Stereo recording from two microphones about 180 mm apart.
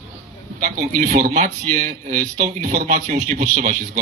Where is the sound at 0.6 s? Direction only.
45° right (ahead or behind).